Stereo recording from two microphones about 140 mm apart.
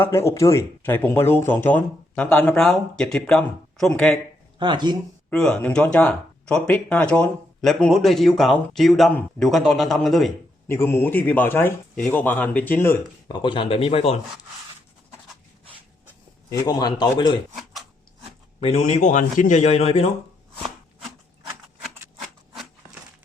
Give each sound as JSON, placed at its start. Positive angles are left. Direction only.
{"t": 0.0, "sound": "speech", "side_deg": 15}
{"t": 4.5, "sound": "speech", "side_deg": -35}
{"t": 5.3, "sound": "speech", "side_deg": 5}
{"t": 10.7, "sound": "speech", "side_deg": 15}
{"t": 13.2, "sound": "speech", "side_deg": 35}
{"t": 16.5, "sound": "speech", "side_deg": 30}
{"t": 18.6, "sound": "speech", "side_deg": 50}